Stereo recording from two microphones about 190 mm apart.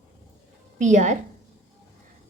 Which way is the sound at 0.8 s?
40° right (ahead or behind).